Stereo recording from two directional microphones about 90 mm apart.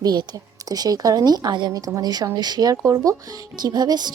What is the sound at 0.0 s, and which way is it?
Speech, 45° right (ahead or behind).